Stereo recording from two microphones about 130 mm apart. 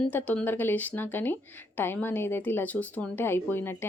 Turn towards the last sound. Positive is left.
turn(degrees=15)  # may be behind; listen again after turning